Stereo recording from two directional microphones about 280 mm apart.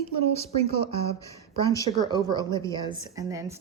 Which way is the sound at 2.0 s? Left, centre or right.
Centre.